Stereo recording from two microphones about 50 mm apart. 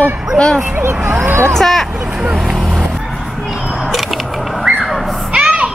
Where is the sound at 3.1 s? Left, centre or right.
Centre.